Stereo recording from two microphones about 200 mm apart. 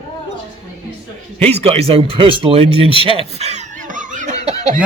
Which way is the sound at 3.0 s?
30° right (ahead or behind).